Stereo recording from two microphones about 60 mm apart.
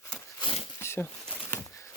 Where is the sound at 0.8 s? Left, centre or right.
Left.